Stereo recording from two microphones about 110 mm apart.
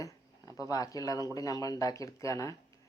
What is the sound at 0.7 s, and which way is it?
Speech, 30° left (ahead or behind).